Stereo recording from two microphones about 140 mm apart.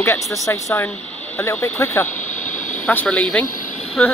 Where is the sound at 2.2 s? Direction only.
65° left (ahead or behind).